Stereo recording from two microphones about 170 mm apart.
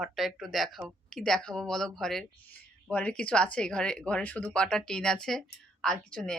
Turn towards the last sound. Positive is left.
turn(degrees=5)  # may be behind; listen again after turning